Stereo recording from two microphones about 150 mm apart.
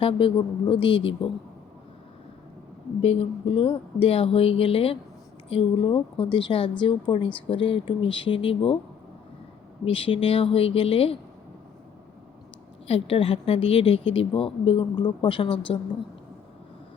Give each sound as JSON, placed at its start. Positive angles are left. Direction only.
{"t": 0.0, "sound": "a woman's voice", "side_deg": 35}
{"t": 3.0, "sound": "a woman's voice", "side_deg": 40}
{"t": 9.8, "sound": "a woman's voice", "side_deg": 40}
{"t": 12.9, "sound": "a woman's voice", "side_deg": 40}